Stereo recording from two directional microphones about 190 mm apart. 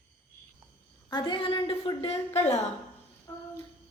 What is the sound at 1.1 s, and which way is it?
A woman's voice, 25° left (ahead or behind).